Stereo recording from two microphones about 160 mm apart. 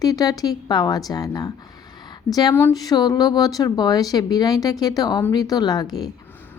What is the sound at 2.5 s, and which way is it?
Speech, 20° left (ahead or behind).